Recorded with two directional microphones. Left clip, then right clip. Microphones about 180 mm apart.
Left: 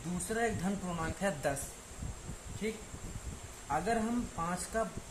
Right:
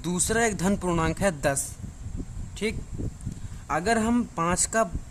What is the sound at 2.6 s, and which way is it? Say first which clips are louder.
A man's voice: right 9 dB; 55° right (ahead or behind).